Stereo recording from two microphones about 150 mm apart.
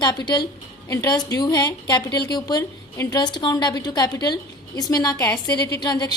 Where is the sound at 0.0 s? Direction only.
30° left (ahead or behind).